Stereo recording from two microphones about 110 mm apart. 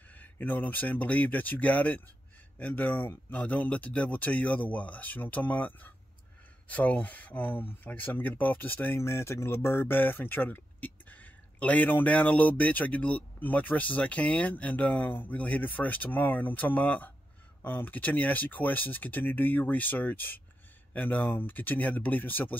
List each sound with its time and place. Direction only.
0.1 s speech: 15° left (ahead or behind)